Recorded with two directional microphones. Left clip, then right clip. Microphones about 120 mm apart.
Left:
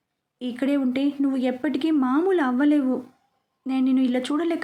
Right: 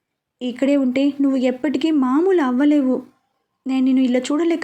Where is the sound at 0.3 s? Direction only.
20° right (ahead or behind).